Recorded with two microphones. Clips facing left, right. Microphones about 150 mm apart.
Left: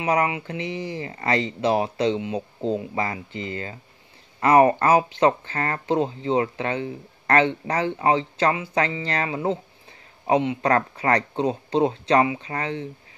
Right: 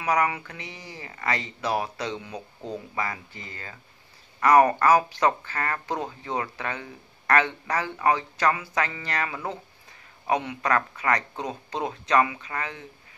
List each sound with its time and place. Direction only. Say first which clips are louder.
0.0 s speech: left 2 dB; 25° left (ahead or behind)